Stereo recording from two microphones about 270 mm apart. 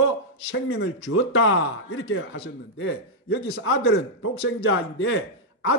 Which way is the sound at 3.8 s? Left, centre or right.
Left.